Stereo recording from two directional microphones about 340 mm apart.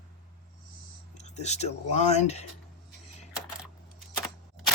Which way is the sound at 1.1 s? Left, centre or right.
Centre.